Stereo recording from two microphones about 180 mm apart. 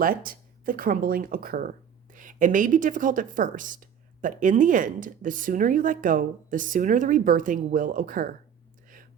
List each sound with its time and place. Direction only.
0.0 s speech: 50° right (ahead or behind)